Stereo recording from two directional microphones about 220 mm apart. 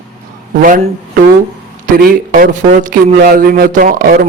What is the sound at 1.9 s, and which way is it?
A man's voice, 40° right (ahead or behind).